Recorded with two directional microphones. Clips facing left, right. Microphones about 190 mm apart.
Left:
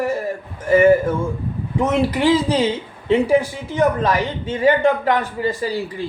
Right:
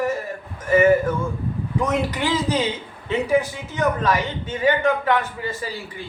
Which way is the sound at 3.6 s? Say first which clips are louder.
Left 4 dB; 30° left (ahead or behind).